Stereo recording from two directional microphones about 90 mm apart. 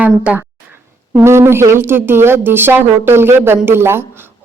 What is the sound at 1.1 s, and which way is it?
Speech, 30° right (ahead or behind).